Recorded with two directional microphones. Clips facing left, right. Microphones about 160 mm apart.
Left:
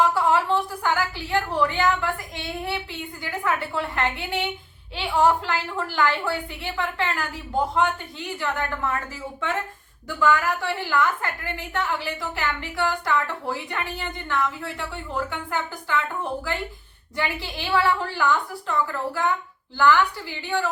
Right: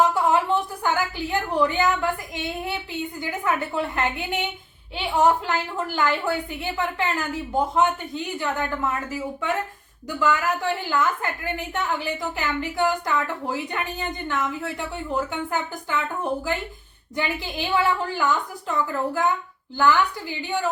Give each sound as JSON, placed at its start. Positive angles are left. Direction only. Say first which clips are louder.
{"t": 0.0, "sound": "a sound", "louder": "right 1 dB", "side_deg": -20}
{"t": 3.2, "sound": "a woman's voice", "louder": "even", "side_deg": -20}
{"t": 17.2, "sound": "a woman's voice", "louder": "right 2 dB", "side_deg": -20}